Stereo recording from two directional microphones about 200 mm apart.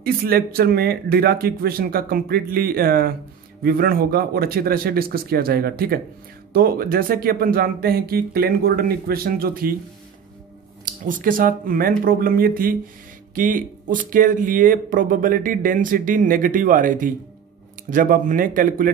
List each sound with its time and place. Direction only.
0.0 s speech: 50° right (ahead or behind)
11.1 s speech: 45° right (ahead or behind)